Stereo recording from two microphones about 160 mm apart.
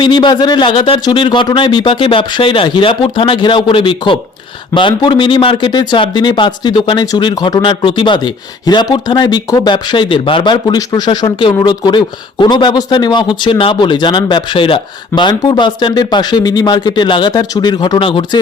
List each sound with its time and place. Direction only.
0.0 s a man's voice: 30° left (ahead or behind)